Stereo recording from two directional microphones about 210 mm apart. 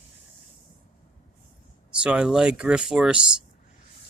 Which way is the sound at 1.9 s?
5° right (ahead or behind).